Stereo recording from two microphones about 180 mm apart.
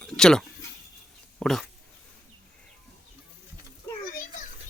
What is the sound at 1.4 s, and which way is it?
Speech, centre (ahead or behind).